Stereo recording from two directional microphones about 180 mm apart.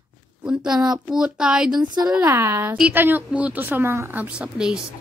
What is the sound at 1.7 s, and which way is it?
Speech, 25° right (ahead or behind).